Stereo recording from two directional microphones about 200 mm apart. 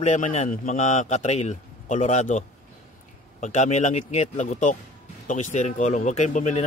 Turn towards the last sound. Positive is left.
turn(degrees=35)  # may be behind; listen again after turning